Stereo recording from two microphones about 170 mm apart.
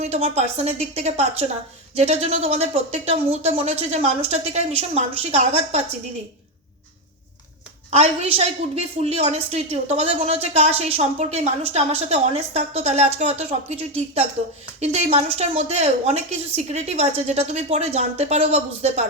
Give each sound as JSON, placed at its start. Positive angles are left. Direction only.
{"t": 0.0, "sound": "a woman's voice", "side_deg": -40}
{"t": 7.9, "sound": "a woman's voice", "side_deg": -40}